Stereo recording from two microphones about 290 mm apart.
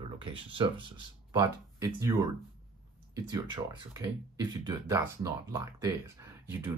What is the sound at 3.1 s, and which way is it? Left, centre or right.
Speech, centre.